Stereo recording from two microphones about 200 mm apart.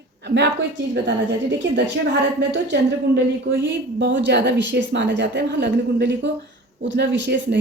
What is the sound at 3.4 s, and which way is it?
A woman's voice, 65° right (ahead or behind).